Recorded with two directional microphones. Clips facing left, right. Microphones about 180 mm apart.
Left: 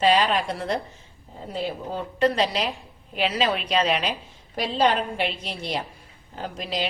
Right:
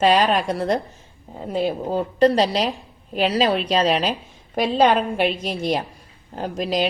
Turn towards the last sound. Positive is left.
turn(degrees=-45)  # may be behind; listen again after turning